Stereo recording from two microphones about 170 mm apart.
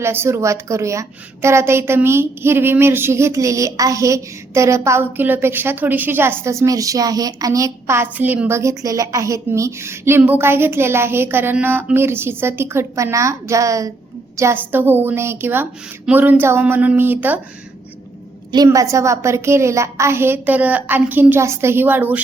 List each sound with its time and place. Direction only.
0.0 s a woman's voice: 15° right (ahead or behind)
18.5 s a woman's voice: 20° right (ahead or behind)